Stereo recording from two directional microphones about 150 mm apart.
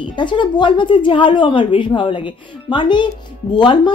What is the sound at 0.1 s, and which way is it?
A woman's voice, 30° left (ahead or behind).